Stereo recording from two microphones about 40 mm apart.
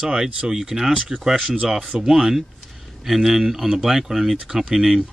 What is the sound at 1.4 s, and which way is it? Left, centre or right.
Speech, right.